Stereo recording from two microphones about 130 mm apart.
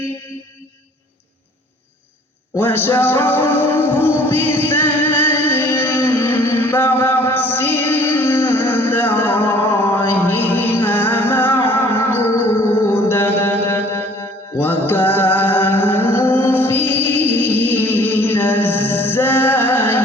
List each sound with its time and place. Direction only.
2.6 s music: 15° left (ahead or behind)